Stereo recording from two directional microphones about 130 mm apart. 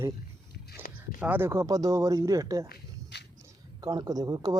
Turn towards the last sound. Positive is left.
turn(degrees=-30)  # may be behind; listen again after turning